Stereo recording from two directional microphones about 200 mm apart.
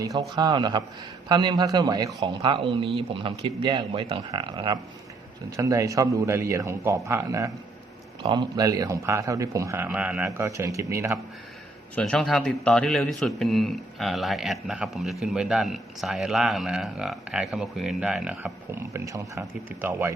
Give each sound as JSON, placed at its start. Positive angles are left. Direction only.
{"t": 0.0, "sound": "a man's voice", "side_deg": -15}
{"t": 11.9, "sound": "a man's voice", "side_deg": 5}